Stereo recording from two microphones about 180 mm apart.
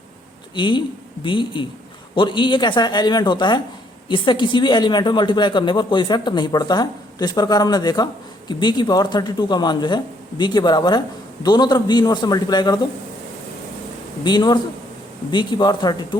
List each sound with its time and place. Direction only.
0.5 s a woman's voice: 25° left (ahead or behind)
14.3 s a woman's voice: 25° left (ahead or behind)